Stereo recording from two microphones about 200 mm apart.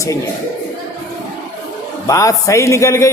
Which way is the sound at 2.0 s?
15° left (ahead or behind).